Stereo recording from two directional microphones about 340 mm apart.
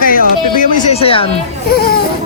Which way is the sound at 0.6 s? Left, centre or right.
Left.